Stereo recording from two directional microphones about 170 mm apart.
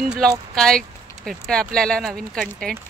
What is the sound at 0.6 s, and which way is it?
Speech, 5° left (ahead or behind).